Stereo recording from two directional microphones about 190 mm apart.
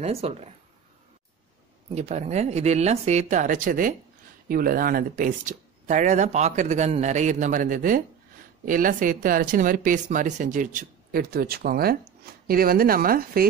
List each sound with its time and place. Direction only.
0.0 s speech: 30° right (ahead or behind)
2.0 s speech: 35° right (ahead or behind)